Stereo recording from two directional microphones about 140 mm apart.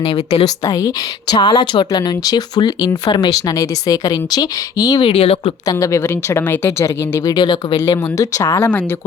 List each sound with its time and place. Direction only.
0.0 s speech: 45° left (ahead or behind)
0.4 s speech: 25° left (ahead or behind)
5.0 s speech: 45° left (ahead or behind)
5.6 s speech: 20° left (ahead or behind)